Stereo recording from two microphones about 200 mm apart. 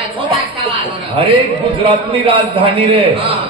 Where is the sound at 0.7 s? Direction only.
25° right (ahead or behind).